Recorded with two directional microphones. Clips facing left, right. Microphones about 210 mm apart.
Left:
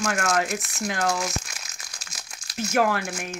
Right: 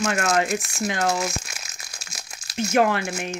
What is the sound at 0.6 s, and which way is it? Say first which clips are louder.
Speech: right 4 dB; 25° right (ahead or behind).